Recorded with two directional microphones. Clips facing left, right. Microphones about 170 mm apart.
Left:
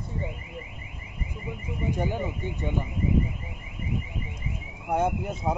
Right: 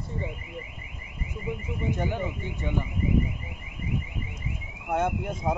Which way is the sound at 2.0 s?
15° left (ahead or behind).